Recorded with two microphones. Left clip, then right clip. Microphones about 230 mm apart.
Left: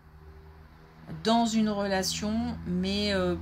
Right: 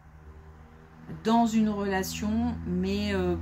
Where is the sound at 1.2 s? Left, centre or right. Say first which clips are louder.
Right 1 dB; left.